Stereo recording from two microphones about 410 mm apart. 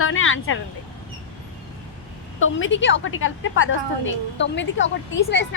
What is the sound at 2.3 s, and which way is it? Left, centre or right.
A woman's voice, left.